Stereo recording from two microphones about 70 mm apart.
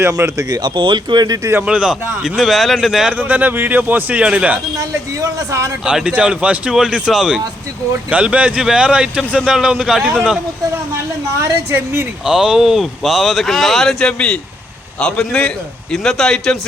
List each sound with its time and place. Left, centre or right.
0.3 s speech: right
1.6 s speech: centre
3.1 s speech: right
4.8 s speech: right
5.8 s speech: centre
8.1 s speech: centre
12.2 s speech: centre
14.1 s a man's voice: centre